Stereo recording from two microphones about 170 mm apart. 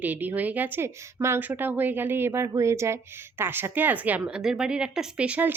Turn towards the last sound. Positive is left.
turn(degrees=-10)  # may be behind; listen again after turning